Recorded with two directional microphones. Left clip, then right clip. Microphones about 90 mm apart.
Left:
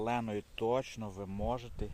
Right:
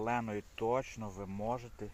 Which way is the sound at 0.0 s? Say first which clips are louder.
Left 1 dB; 30° left (ahead or behind).